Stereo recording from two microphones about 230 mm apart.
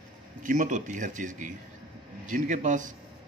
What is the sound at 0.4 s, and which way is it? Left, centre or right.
A man's voice, right.